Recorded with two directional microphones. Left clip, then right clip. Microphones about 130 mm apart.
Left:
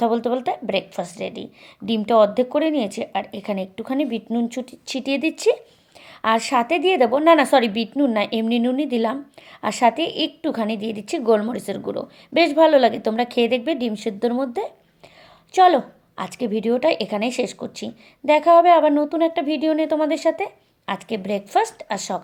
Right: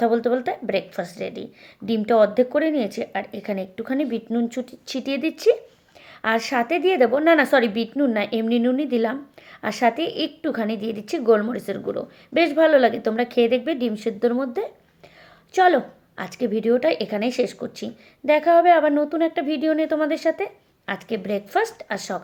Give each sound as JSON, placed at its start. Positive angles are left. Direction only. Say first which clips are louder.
{"t": 0.0, "sound": "a woman's voice", "louder": "even", "side_deg": 20}